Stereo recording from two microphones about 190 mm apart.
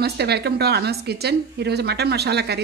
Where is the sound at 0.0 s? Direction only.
60° right (ahead or behind).